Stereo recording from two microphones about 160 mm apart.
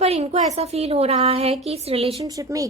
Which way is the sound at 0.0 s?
40° right (ahead or behind).